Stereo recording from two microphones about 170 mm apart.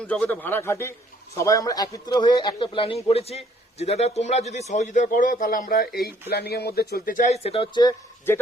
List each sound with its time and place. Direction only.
0.0 s a man's voice: 5° left (ahead or behind); by 5.9 s 55° left (ahead or behind)
6.3 s speech: 70° left (ahead or behind); by 8.4 s 25° left (ahead or behind)